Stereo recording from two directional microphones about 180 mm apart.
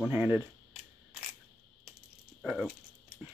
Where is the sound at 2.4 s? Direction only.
Centre (ahead or behind).